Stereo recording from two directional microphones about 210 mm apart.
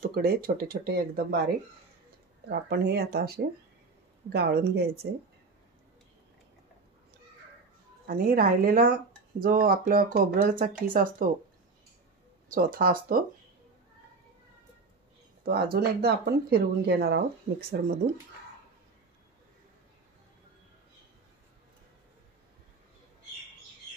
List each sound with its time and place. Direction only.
0.1 s speech: 45° right (ahead or behind)
2.5 s speech: 50° right (ahead or behind)
8.1 s speech: 45° right (ahead or behind)
12.4 s speech: 40° right (ahead or behind)
15.4 s speech: 50° right (ahead or behind)